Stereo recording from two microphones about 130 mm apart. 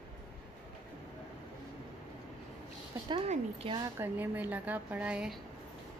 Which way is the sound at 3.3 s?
50° right (ahead or behind).